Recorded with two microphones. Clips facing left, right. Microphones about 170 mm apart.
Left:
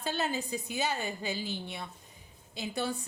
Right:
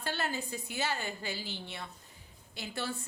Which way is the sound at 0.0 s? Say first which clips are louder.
Left 3 dB; 20° left (ahead or behind).